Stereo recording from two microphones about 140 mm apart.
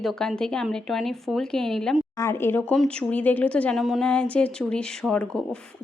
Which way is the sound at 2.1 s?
20° left (ahead or behind).